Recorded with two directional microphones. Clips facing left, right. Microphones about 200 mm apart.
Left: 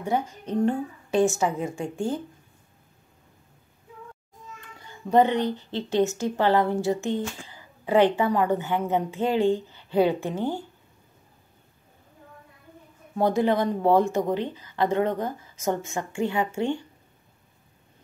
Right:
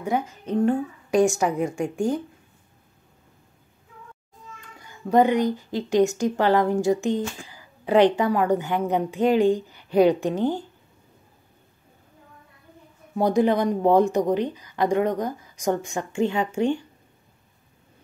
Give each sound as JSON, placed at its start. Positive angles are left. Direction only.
{"t": 0.3, "sound": "a woman's voice", "side_deg": -10}
{"t": 5.1, "sound": "a woman's voice", "side_deg": -10}
{"t": 13.1, "sound": "a woman's voice", "side_deg": -15}